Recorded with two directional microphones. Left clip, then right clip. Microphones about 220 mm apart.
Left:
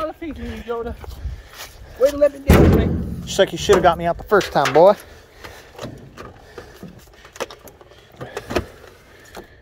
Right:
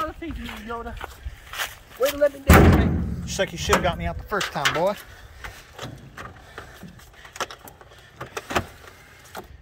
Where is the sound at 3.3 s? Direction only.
30° left (ahead or behind).